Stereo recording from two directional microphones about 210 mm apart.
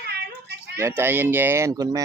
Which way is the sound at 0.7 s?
10° right (ahead or behind).